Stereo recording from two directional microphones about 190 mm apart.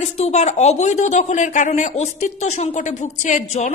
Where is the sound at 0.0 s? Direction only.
35° left (ahead or behind).